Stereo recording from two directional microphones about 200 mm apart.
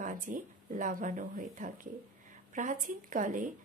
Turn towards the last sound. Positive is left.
turn(degrees=-40)  # may be behind; listen again after turning